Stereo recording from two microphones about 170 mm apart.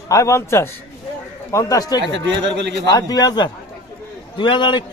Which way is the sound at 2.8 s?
25° left (ahead or behind).